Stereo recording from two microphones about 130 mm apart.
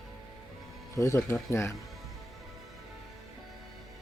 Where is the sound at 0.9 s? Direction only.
20° left (ahead or behind).